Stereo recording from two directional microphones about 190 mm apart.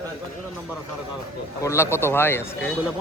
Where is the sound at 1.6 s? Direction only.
15° left (ahead or behind).